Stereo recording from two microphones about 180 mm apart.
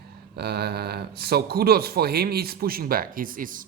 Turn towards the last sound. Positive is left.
turn(degrees=-50)  # may be behind; listen again after turning